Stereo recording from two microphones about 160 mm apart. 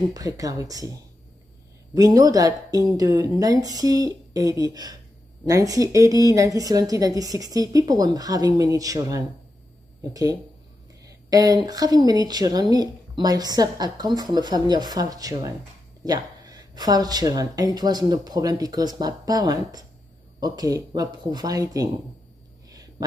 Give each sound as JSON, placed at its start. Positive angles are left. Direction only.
{"t": 0.1, "sound": "speech", "side_deg": -20}
{"t": 11.1, "sound": "speech", "side_deg": -20}
{"t": 22.7, "sound": "a sound", "side_deg": -25}